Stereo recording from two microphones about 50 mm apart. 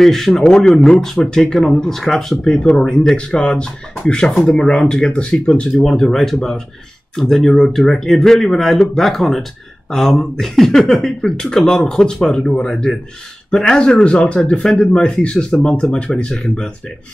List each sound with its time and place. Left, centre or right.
0.0 s speech: centre
0.4 s speech: centre
2.6 s speech: centre